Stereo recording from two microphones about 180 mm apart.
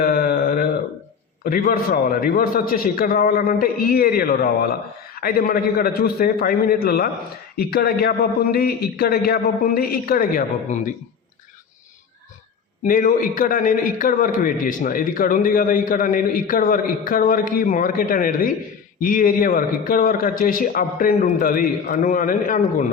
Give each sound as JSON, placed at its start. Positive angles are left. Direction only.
{"t": 0.0, "sound": "a sound", "side_deg": 55}
{"t": 1.5, "sound": "a man's voice", "side_deg": 55}
{"t": 12.8, "sound": "a man's voice", "side_deg": 50}